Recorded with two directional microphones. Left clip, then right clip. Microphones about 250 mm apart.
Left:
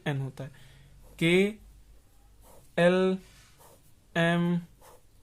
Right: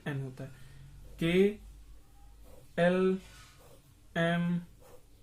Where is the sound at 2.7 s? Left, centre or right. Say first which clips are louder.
Left 4 dB; left.